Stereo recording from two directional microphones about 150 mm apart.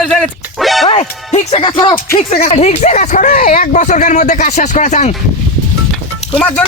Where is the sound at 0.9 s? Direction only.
45° left (ahead or behind).